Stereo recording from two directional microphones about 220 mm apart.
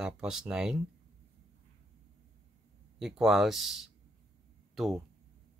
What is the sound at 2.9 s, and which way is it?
Speech, centre (ahead or behind).